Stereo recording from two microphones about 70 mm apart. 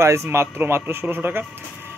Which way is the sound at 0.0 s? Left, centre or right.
Right.